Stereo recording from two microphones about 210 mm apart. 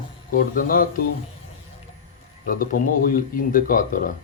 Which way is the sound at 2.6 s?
40° left (ahead or behind).